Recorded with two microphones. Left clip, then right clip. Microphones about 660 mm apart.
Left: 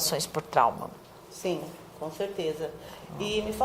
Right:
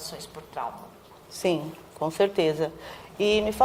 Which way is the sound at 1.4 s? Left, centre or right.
Right.